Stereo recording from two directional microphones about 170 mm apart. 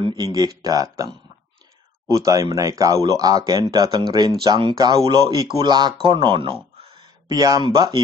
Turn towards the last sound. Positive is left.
turn(degrees=-25)  # may be behind; listen again after turning